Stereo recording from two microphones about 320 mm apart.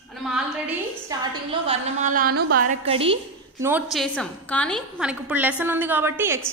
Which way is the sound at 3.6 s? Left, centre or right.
Centre.